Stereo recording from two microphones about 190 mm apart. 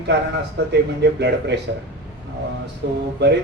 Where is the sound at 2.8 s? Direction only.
60° right (ahead or behind).